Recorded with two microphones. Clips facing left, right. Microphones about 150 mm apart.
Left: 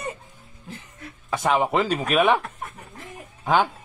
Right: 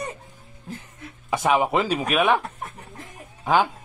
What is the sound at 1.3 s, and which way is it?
Speech, 10° right (ahead or behind).